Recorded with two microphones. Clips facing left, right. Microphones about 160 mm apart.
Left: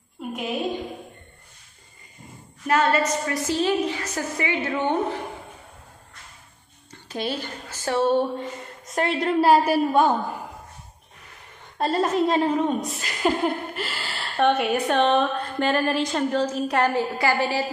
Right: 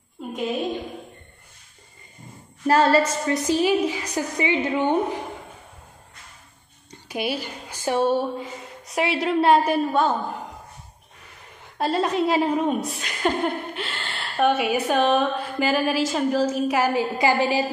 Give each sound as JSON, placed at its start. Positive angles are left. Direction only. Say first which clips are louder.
{"t": 2.6, "sound": "a woman's voice", "louder": "right 3 dB", "side_deg": -30}
{"t": 6.9, "sound": "a woman's voice", "louder": "right 2 dB", "side_deg": -10}
{"t": 11.8, "sound": "a woman's voice", "louder": "even", "side_deg": 0}
{"t": 17.2, "sound": "a woman's voice", "louder": "right 4 dB", "side_deg": -15}